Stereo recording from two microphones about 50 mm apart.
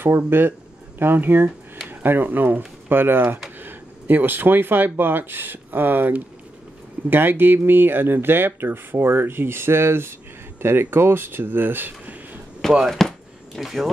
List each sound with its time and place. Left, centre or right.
0.3 s speech: right
12.8 s speech: centre